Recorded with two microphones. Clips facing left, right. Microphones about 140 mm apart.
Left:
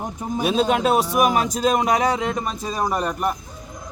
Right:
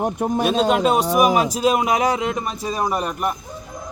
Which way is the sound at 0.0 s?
65° right (ahead or behind).